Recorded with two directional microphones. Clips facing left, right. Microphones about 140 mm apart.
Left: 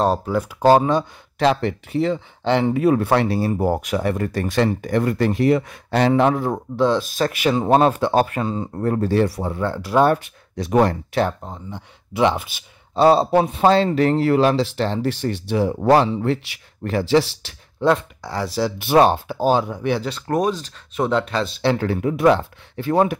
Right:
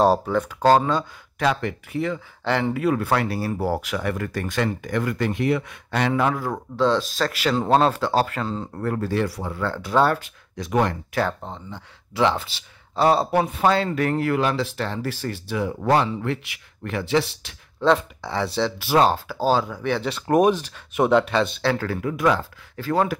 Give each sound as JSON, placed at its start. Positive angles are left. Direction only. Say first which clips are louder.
{"t": 0.0, "sound": "speech", "louder": "right 1 dB", "side_deg": 0}
{"t": 1.4, "sound": "speech", "louder": "left 5 dB", "side_deg": 30}
{"t": 8.8, "sound": "speech", "louder": "left 5 dB", "side_deg": 25}
{"t": 11.4, "sound": "speech", "louder": "left 2 dB", "side_deg": 5}
{"t": 12.1, "sound": "speech", "louder": "left 2 dB", "side_deg": 20}
{"t": 17.8, "sound": "speech", "louder": "left 1 dB", "side_deg": 0}
{"t": 18.8, "sound": "speech", "louder": "left 4 dB", "side_deg": 20}
{"t": 20.0, "sound": "speech", "louder": "even", "side_deg": 0}
{"t": 20.2, "sound": "speech", "louder": "right 4 dB", "side_deg": -15}
{"t": 21.6, "sound": "speech", "louder": "left 4 dB", "side_deg": 20}